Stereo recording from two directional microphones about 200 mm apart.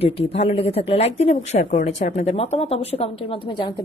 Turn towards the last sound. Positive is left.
turn(degrees=25)  # may be behind; listen again after turning